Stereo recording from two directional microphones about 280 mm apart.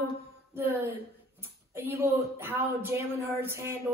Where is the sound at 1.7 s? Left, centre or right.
Centre.